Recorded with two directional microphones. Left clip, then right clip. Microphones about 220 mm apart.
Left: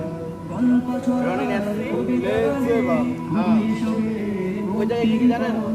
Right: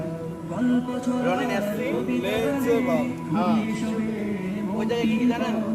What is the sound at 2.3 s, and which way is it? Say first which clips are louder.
Speech: left 3 dB; 45° right (ahead or behind).